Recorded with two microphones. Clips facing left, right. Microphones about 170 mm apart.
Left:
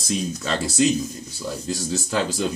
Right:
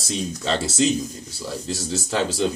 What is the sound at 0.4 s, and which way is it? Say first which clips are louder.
Speech: right 2 dB; 30° right (ahead or behind).